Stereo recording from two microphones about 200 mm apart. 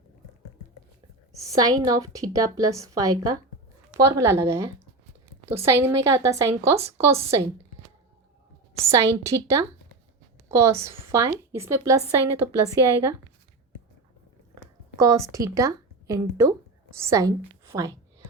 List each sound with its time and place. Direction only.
1.4 s a woman's voice: 15° right (ahead or behind)
8.8 s a woman's voice: 15° right (ahead or behind)
14.9 s a woman's voice: 15° right (ahead or behind)